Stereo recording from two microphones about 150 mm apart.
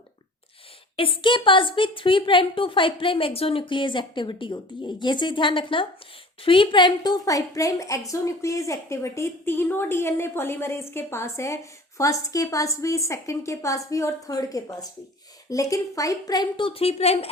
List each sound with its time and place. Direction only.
0.9 s a woman's voice: 35° left (ahead or behind)